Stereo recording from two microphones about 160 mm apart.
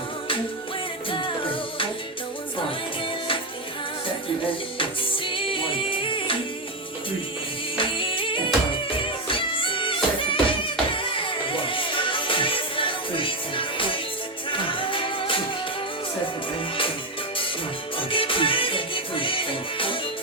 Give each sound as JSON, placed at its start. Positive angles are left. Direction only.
{"t": 1.1, "sound": "music", "side_deg": 30}
{"t": 3.0, "sound": "music", "side_deg": 35}
{"t": 4.8, "sound": "music", "side_deg": 35}
{"t": 7.8, "sound": "music", "side_deg": 30}
{"t": 17.9, "sound": "music", "side_deg": 35}